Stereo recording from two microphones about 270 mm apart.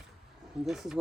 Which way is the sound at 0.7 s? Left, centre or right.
Centre.